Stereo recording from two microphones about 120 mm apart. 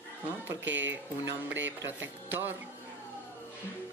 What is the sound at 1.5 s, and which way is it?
Speech, 15° right (ahead or behind).